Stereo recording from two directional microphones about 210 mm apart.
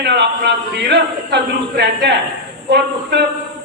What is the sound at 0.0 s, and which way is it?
A man's voice, 55° right (ahead or behind).